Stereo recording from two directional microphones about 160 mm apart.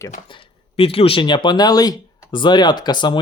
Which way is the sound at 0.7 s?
35° left (ahead or behind).